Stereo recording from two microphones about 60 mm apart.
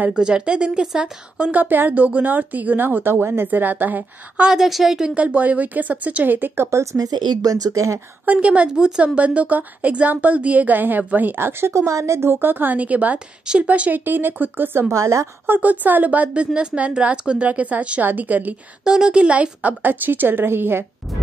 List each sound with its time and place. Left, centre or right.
0.2 s speech: centre
1.4 s speech: right
4.4 s speech: centre
5.1 s speech: right
8.3 s a woman's voice: right
8.6 s speech: centre
9.0 s a woman's voice: right
15.0 s a woman's voice: right
15.4 s a woman's voice: right
18.9 s speech: centre; by 20.8 s right